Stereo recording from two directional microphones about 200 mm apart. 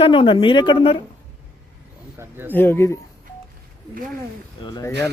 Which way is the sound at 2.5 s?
10° left (ahead or behind).